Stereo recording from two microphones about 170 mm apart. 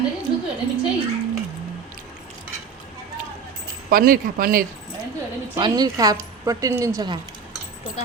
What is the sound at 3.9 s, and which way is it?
Speech, 55° right (ahead or behind).